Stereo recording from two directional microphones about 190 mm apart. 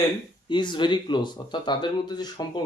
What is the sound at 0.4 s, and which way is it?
Speech, 25° left (ahead or behind).